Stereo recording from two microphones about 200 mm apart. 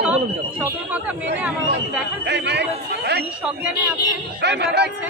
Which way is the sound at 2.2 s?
55° right (ahead or behind).